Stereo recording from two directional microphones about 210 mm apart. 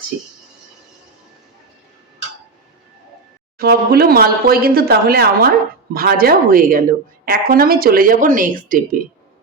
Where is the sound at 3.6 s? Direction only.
50° right (ahead or behind).